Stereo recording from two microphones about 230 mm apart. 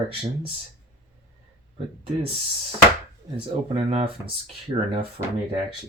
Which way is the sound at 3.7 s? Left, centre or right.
Right.